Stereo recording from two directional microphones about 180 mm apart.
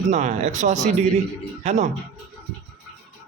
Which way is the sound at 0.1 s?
40° right (ahead or behind).